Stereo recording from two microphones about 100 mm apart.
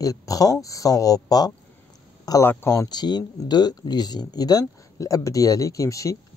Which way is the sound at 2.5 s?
25° left (ahead or behind).